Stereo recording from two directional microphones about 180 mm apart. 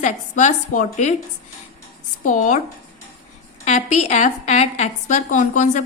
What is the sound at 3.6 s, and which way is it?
A woman's voice, 40° left (ahead or behind).